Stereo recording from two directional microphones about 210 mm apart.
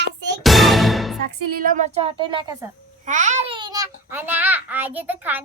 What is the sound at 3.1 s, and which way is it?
A child's voice, 35° right (ahead or behind).